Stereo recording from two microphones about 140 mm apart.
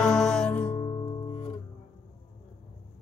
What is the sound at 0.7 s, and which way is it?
Music, 40° left (ahead or behind).